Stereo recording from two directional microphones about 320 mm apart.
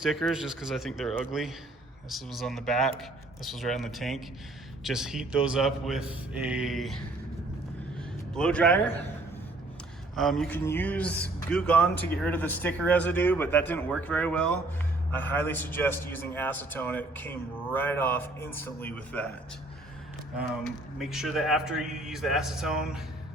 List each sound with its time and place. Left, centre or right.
0.0 s speech: centre
8.3 s speech: centre
10.2 s speech: centre
21.0 s speech: centre